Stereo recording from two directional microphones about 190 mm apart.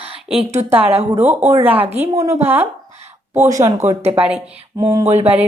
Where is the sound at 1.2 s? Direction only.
10° right (ahead or behind).